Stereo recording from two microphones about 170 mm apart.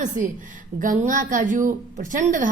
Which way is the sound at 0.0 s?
50° right (ahead or behind).